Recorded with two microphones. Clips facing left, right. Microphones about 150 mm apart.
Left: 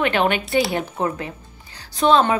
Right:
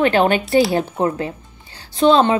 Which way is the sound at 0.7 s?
30° right (ahead or behind).